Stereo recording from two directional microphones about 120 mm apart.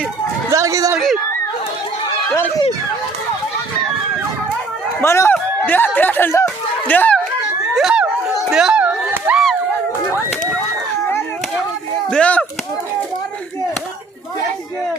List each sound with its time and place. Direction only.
0.5 s speech: 25° right (ahead or behind)
0.9 s speech: 5° right (ahead or behind)
4.9 s speech: 25° left (ahead or behind)
6.8 s a sound: 15° left (ahead or behind)
7.8 s a sound: 5° right (ahead or behind)
12.1 s chop: 10° left (ahead or behind)